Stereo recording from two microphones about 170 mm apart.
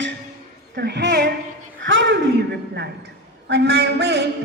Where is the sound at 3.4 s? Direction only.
75° right (ahead or behind).